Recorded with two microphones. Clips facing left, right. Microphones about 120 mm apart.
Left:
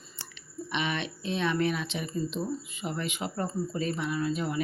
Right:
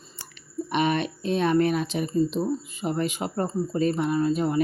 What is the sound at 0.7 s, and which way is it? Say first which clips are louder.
Speech: right 8 dB; 45° right (ahead or behind).